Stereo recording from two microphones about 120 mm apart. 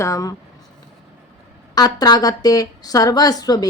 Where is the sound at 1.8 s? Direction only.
35° left (ahead or behind).